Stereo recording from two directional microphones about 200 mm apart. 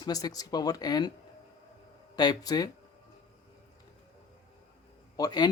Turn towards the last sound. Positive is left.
turn(degrees=20)  # may be behind; listen again after turning